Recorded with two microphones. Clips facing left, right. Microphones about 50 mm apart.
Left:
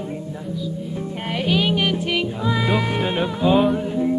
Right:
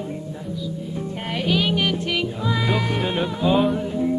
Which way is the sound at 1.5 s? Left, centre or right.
Centre.